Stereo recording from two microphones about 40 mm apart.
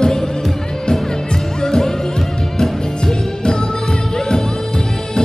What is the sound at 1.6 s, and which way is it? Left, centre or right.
Music, centre.